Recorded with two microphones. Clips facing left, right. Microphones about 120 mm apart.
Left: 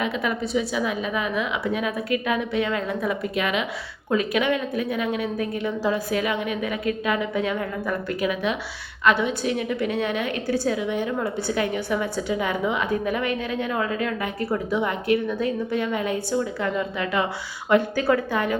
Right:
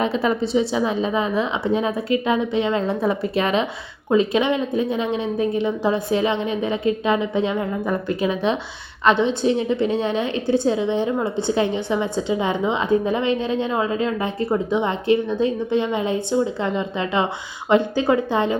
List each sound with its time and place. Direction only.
0.0 s a woman's voice: 30° right (ahead or behind)